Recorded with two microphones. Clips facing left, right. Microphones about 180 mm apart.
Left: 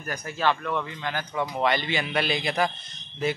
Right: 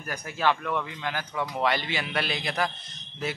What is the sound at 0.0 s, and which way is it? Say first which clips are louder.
A man's voice: left 1 dB; 10° right (ahead or behind).